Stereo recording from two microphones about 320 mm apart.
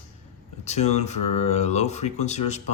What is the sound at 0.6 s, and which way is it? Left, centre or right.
Speech, left.